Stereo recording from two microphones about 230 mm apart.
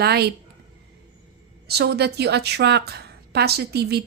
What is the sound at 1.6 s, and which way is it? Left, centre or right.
Speech, right.